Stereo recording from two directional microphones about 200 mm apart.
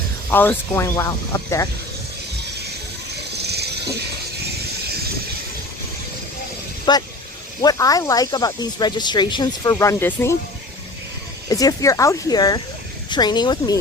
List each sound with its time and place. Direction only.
0.3 s speech: 10° left (ahead or behind)
3.4 s a sound: 55° right (ahead or behind)
6.9 s speech: 25° left (ahead or behind)
11.4 s speech: 20° left (ahead or behind)